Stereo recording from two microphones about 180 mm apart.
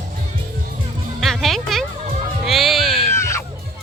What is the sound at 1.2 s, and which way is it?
Music, centre (ahead or behind).